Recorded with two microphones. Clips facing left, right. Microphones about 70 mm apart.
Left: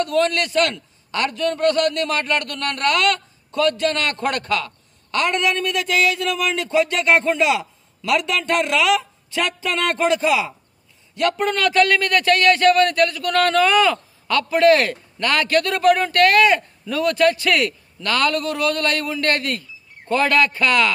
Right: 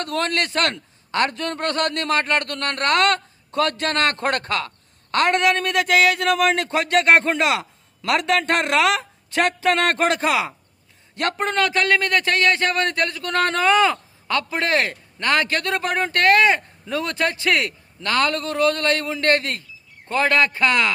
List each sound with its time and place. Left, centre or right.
0.0 s a man's voice: right
11.1 s a man's voice: right